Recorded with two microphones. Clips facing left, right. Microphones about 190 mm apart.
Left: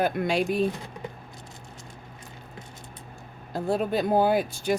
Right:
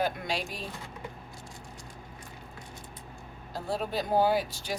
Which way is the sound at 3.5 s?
55° left (ahead or behind).